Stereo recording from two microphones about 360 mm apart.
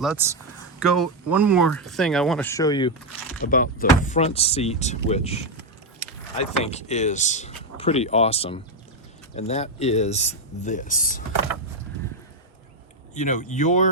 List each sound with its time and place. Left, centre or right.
0.0 s speech: centre
3.4 s speech: left
13.1 s speech: centre